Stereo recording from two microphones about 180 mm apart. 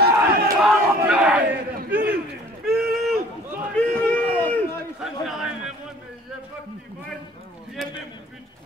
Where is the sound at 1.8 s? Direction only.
55° right (ahead or behind).